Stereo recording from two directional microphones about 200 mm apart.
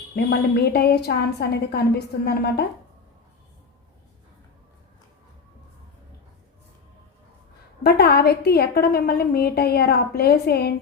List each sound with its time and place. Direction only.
0.2 s a woman's voice: 50° left (ahead or behind)
7.9 s a woman's voice: 50° left (ahead or behind)